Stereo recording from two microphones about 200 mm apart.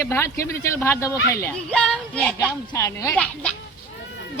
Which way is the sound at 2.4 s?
15° left (ahead or behind).